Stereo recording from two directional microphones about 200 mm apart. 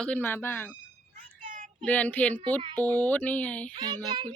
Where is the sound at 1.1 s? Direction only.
40° right (ahead or behind).